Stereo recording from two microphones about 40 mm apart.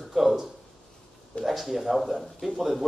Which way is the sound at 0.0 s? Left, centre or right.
Centre.